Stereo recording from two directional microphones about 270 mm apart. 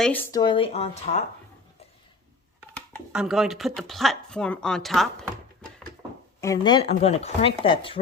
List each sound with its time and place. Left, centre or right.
0.0 s speech: centre; by 1.2 s left
2.6 s speech: centre
6.4 s speech: centre